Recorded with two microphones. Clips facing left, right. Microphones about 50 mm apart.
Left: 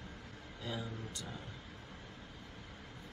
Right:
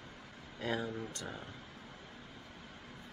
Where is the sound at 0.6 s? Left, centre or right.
Right.